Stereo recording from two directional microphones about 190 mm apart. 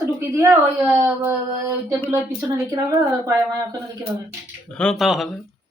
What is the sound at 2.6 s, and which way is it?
Speech, 20° right (ahead or behind).